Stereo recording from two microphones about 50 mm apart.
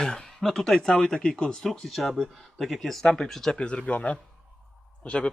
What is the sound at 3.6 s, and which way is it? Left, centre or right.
Speech, left.